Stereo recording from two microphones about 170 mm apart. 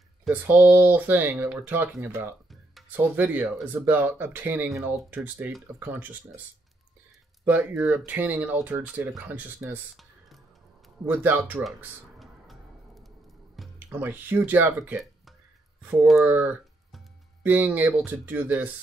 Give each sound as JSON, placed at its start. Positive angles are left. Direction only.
{"t": 0.3, "sound": "speech", "side_deg": -10}
{"t": 7.4, "sound": "speech", "side_deg": -10}
{"t": 12.2, "sound": "a sound", "side_deg": 0}
{"t": 13.6, "sound": "speech", "side_deg": -10}